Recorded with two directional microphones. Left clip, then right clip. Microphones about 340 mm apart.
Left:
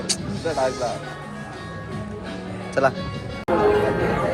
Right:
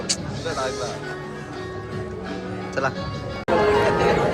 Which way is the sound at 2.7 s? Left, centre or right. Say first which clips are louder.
Left 5 dB; centre.